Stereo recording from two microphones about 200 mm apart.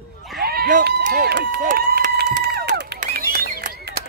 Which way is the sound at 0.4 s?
50° right (ahead or behind).